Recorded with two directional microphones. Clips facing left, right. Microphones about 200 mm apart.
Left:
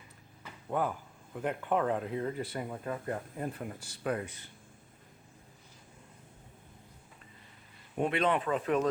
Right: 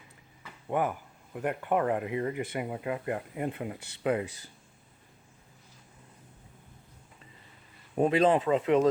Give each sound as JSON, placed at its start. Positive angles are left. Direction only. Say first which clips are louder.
{"t": 0.7, "sound": "speech", "louder": "right 3 dB", "side_deg": -15}
{"t": 7.9, "sound": "speech", "louder": "right 6 dB", "side_deg": -35}